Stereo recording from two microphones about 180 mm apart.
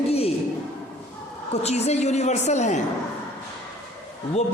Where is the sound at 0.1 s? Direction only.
35° left (ahead or behind).